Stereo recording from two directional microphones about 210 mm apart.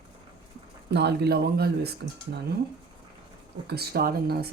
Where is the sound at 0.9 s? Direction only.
50° right (ahead or behind).